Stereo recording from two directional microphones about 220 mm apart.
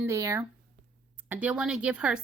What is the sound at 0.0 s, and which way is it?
A woman's voice, 15° right (ahead or behind).